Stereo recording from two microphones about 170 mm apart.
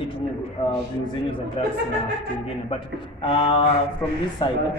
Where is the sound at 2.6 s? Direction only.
30° left (ahead or behind).